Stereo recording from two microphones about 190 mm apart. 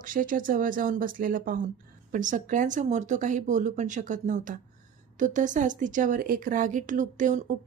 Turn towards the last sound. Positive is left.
turn(degrees=-40)  # may be behind; listen again after turning